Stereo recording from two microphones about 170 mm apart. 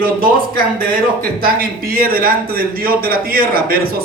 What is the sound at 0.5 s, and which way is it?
Speech, 60° right (ahead or behind).